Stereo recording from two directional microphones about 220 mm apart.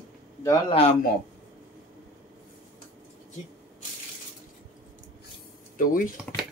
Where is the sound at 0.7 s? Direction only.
30° left (ahead or behind).